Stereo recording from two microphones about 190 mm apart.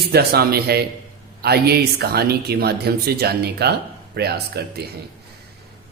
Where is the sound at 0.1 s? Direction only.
55° right (ahead or behind).